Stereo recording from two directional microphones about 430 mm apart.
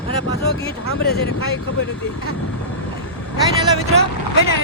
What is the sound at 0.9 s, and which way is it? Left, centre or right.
Speech, left.